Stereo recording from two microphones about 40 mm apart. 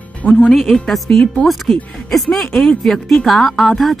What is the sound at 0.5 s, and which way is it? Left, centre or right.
Speech, centre.